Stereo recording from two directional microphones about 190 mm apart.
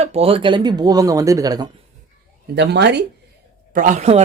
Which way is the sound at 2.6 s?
60° right (ahead or behind).